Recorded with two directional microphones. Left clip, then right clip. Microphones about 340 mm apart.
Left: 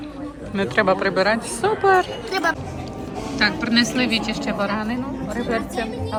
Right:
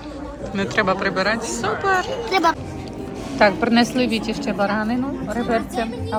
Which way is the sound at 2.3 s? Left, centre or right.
Centre.